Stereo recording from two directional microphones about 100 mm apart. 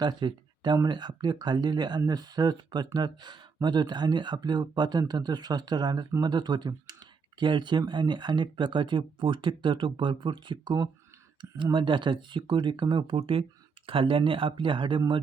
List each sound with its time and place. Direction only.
0.0 s speech: 45° right (ahead or behind)
13.1 s speech: 65° right (ahead or behind)